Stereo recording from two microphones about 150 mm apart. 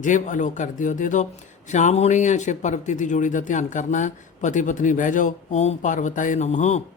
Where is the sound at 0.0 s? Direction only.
55° left (ahead or behind).